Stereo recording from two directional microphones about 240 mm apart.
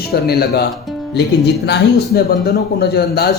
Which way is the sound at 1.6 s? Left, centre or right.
Left.